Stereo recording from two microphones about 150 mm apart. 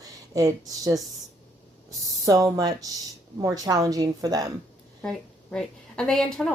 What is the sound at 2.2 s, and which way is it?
Speech, 20° right (ahead or behind).